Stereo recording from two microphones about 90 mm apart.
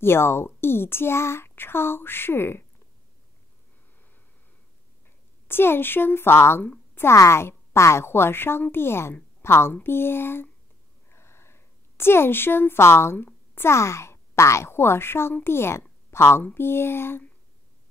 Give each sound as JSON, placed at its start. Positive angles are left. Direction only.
{"t": 0.0, "sound": "a woman's voice", "side_deg": 25}
{"t": 5.5, "sound": "a woman's voice", "side_deg": 25}